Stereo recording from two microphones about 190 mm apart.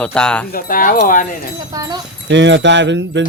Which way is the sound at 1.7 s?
20° right (ahead or behind).